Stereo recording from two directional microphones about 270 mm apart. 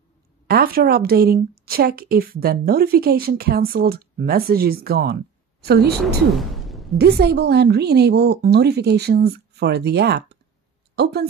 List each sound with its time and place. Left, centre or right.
0.5 s a woman's voice: right
6.3 s a sound: centre
7.0 s a woman's voice: right